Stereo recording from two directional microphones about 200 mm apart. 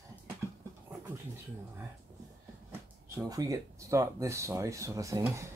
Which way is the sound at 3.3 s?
15° right (ahead or behind).